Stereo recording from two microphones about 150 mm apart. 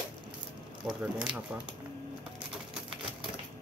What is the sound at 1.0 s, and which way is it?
Speech, 5° right (ahead or behind).